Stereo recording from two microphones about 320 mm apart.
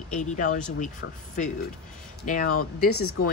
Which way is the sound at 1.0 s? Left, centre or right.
Left.